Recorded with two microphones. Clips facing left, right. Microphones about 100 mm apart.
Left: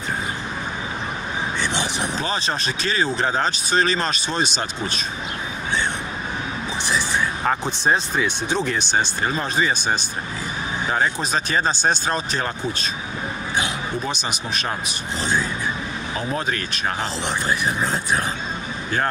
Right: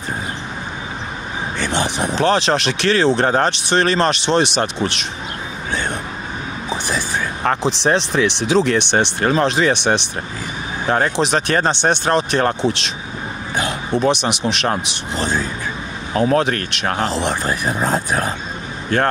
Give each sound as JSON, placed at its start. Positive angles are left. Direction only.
{"t": 1.6, "sound": "speech", "side_deg": -45}
{"t": 2.1, "sound": "speech", "side_deg": -80}
{"t": 7.4, "sound": "speech", "side_deg": -80}
{"t": 13.9, "sound": "speech", "side_deg": -65}
{"t": 16.2, "sound": "speech", "side_deg": -65}